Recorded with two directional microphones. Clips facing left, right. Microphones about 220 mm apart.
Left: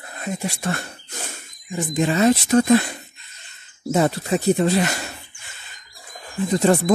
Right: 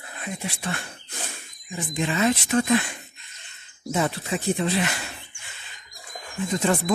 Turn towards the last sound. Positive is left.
turn(degrees=35)  # may be behind; listen again after turning